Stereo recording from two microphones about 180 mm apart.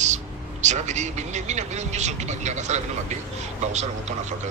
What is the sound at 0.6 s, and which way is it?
Speech, 40° right (ahead or behind).